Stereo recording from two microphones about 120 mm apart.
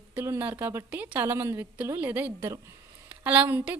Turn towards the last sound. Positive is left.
turn(degrees=-15)  # may be behind; listen again after turning